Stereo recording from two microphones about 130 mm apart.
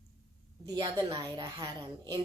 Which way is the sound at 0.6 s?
30° right (ahead or behind).